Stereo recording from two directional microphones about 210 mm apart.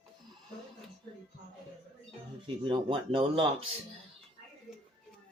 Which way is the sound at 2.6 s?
25° right (ahead or behind).